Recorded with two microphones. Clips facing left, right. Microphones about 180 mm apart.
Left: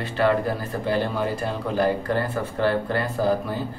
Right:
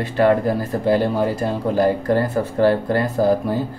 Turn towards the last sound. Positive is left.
turn(degrees=-40)  # may be behind; listen again after turning